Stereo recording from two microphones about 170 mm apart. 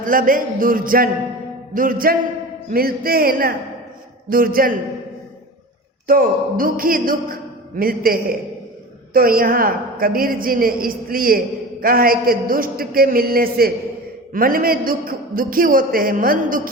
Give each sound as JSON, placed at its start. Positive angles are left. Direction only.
{"t": 0.0, "sound": "a woman's voice", "side_deg": -55}
{"t": 6.1, "sound": "a woman's voice", "side_deg": -55}